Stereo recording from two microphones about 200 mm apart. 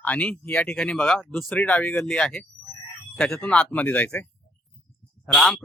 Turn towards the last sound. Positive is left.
turn(degrees=0)  # may be behind; listen again after turning